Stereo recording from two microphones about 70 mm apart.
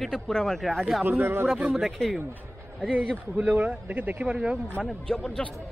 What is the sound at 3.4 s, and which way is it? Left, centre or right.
Speech, right.